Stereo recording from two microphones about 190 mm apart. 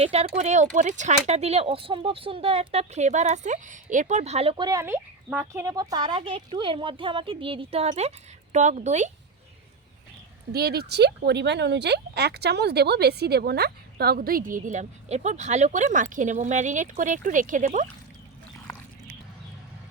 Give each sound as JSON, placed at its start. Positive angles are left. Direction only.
{"t": 0.0, "sound": "speech", "side_deg": -35}
{"t": 10.5, "sound": "speech", "side_deg": -55}